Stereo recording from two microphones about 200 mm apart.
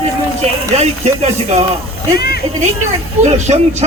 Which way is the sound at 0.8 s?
30° right (ahead or behind).